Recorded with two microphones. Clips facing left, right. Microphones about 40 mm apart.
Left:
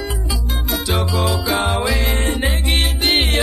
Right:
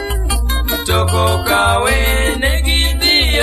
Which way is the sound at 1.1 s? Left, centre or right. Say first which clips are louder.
Right 5 dB; right.